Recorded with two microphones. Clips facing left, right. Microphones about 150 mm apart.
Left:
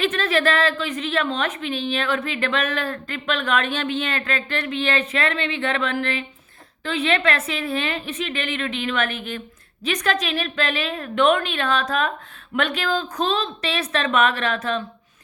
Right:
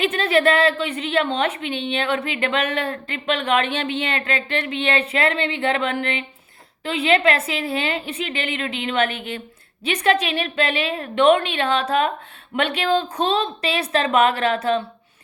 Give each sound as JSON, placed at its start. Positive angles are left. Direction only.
{"t": 0.0, "sound": "a woman's voice", "side_deg": -25}